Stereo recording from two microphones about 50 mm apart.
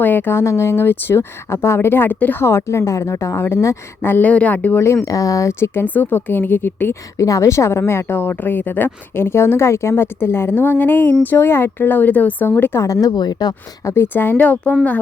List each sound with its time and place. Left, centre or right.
0.0 s a woman's voice: left
0.3 s speech: left
0.9 s a woman's voice: left
4.0 s speech: left
4.3 s a woman's voice: left
5.0 s a woman's voice: left
5.7 s a woman's voice: left
7.2 s a woman's voice: left
8.1 s speech: left
12.5 s speech: left
13.9 s speech: left
14.4 s a woman's voice: left